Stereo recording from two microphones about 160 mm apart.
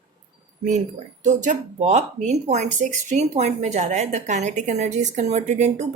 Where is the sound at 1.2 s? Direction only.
50° right (ahead or behind).